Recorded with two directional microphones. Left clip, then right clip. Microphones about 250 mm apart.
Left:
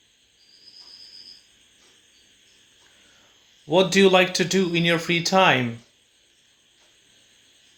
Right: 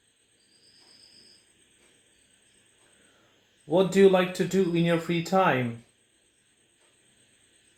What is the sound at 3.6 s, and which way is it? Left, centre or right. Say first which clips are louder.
Speech: left 3 dB; left.